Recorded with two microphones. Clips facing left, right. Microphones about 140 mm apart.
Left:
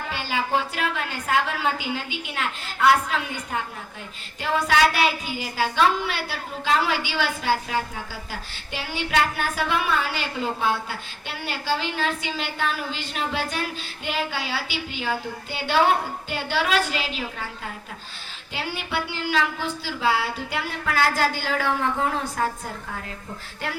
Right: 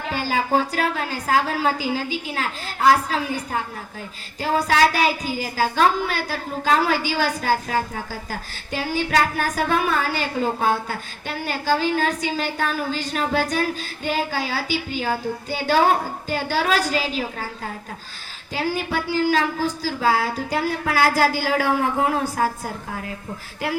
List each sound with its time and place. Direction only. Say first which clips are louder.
0.1 s a woman's voice: right 4 dB; 40° right (ahead or behind)
18.5 s a woman's voice: right 5 dB; 40° right (ahead or behind)
21.3 s speech: right 4 dB; 15° right (ahead or behind)
22.2 s a woman's voice: right 4 dB; 35° right (ahead or behind)